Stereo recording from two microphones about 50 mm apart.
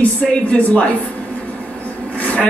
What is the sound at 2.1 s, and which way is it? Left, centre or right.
Vehicle, left.